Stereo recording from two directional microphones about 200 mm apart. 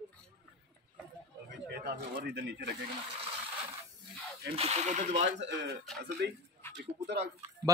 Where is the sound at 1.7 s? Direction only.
50° right (ahead or behind).